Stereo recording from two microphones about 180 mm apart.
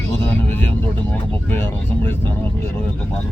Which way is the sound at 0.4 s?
10° left (ahead or behind).